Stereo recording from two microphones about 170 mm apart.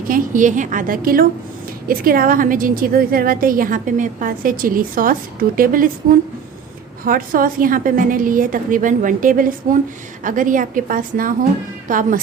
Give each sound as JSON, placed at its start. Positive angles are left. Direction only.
{"t": 0.1, "sound": "a woman's voice", "side_deg": -50}
{"t": 7.0, "sound": "a woman's voice", "side_deg": -55}